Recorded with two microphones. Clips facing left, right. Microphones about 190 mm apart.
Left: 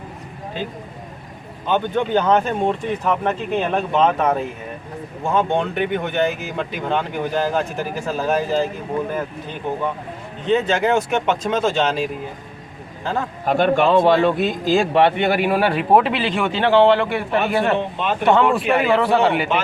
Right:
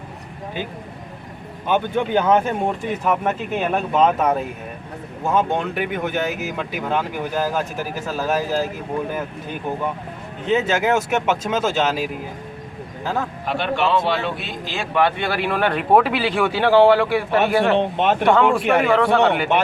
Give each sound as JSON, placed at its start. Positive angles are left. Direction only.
{"t": 1.6, "sound": "speech", "side_deg": -10}
{"t": 10.4, "sound": "speech", "side_deg": -5}
{"t": 13.4, "sound": "speech", "side_deg": 45}
{"t": 18.0, "sound": "speech", "side_deg": -65}
{"t": 18.3, "sound": "speech", "side_deg": 0}